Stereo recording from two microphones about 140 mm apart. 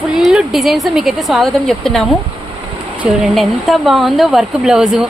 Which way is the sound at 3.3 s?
Centre (ahead or behind).